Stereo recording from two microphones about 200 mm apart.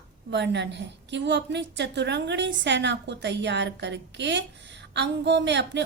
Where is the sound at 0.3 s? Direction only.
60° right (ahead or behind).